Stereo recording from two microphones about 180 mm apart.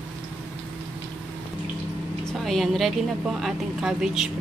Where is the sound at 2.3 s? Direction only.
Centre (ahead or behind).